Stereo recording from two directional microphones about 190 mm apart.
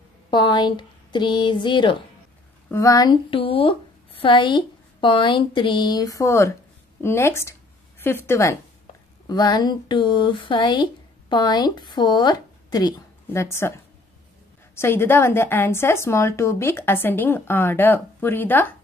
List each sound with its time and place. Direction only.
0.3 s a woman's voice: 25° left (ahead or behind)
14.8 s a woman's voice: 10° left (ahead or behind)